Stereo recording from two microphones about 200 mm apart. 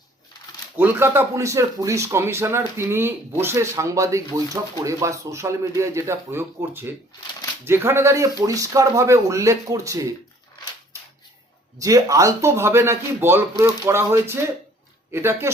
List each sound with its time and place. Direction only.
0.8 s speech: 10° right (ahead or behind)
11.8 s speech: 15° right (ahead or behind)